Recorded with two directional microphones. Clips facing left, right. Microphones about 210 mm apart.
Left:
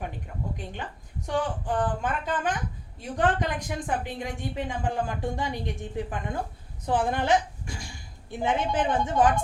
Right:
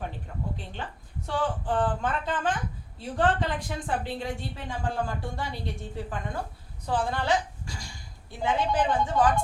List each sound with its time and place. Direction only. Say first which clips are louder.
1.3 s a woman's voice: even; 15° left (ahead or behind)